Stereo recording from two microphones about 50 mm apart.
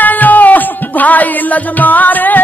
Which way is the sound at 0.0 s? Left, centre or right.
Left.